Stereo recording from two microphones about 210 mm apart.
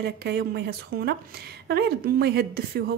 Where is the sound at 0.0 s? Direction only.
55° right (ahead or behind).